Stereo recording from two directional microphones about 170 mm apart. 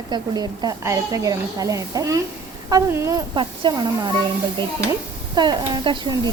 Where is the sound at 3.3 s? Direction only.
30° right (ahead or behind).